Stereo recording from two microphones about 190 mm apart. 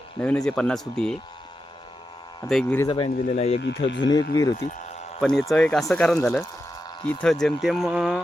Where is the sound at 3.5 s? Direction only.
70° left (ahead or behind).